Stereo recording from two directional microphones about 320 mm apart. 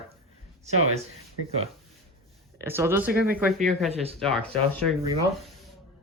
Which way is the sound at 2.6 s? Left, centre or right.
Centre.